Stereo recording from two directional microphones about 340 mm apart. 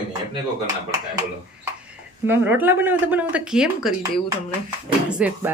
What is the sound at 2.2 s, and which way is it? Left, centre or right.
Speech, centre.